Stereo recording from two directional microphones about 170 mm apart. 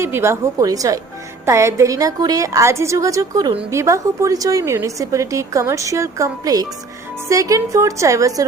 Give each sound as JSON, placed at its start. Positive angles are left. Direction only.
{"t": 0.0, "sound": "a woman's voice", "side_deg": -15}